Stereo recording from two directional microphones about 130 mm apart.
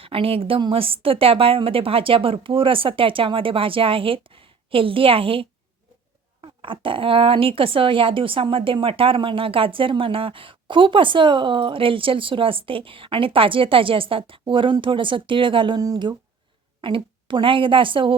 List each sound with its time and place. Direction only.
0.0 s a woman's voice: 45° right (ahead or behind)